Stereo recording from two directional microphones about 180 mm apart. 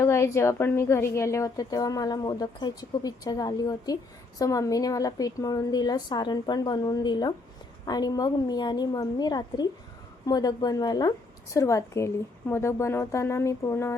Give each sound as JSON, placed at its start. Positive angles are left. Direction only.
{"t": 0.0, "sound": "a woman's voice", "side_deg": 15}